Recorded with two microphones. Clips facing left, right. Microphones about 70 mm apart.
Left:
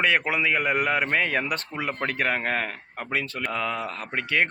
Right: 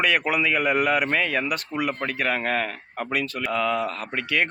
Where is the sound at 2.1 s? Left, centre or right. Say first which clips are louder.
Even; left.